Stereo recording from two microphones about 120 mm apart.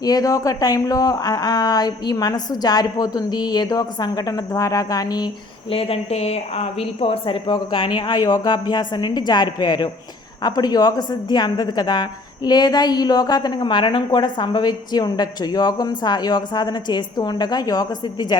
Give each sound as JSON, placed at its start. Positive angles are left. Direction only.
{"t": 0.0, "sound": "speech", "side_deg": 30}
{"t": 5.7, "sound": "speech", "side_deg": 55}